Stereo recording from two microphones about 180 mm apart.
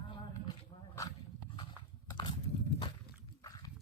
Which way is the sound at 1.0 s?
15° left (ahead or behind).